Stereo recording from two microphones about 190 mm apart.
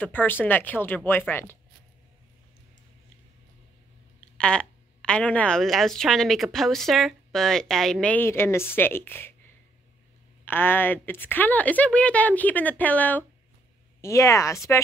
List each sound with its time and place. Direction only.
0.0 s a woman's voice: 10° left (ahead or behind)
4.4 s a woman's voice: 5° left (ahead or behind)
10.4 s a woman's voice: 10° left (ahead or behind)